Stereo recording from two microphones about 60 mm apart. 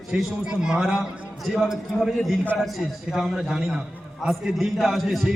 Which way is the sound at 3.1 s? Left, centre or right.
Centre.